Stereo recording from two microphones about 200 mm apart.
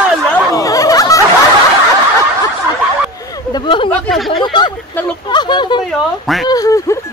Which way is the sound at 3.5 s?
25° left (ahead or behind).